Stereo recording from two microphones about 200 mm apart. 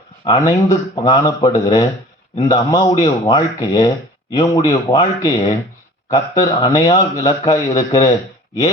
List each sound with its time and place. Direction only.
0.3 s a man's voice: 15° left (ahead or behind)